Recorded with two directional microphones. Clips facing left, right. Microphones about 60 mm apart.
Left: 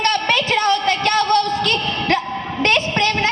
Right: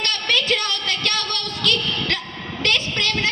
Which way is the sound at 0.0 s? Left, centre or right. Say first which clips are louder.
Left 5 dB; left.